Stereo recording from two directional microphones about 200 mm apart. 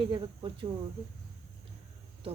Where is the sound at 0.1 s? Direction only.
25° right (ahead or behind).